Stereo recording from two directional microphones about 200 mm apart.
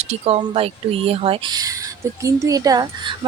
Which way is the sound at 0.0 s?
30° right (ahead or behind).